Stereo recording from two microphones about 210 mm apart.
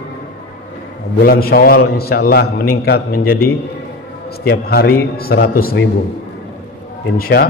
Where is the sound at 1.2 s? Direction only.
45° left (ahead or behind).